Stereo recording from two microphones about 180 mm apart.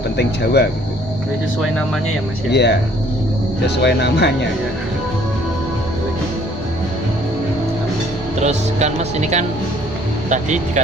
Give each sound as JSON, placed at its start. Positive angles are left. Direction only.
{"t": 0.2, "sound": "speech", "side_deg": 65}
{"t": 2.5, "sound": "speech", "side_deg": 70}
{"t": 3.8, "sound": "speech", "side_deg": 70}
{"t": 8.4, "sound": "speech", "side_deg": -40}